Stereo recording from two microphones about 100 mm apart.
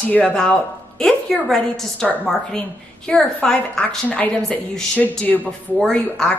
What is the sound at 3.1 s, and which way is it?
A woman's voice, 5° left (ahead or behind).